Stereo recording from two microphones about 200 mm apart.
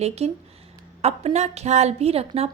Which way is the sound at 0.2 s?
30° right (ahead or behind).